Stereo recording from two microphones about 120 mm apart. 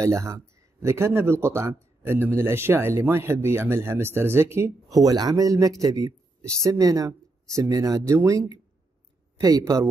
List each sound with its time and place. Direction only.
0.0 s speech: 25° right (ahead or behind)
4.9 s speech: 30° right (ahead or behind)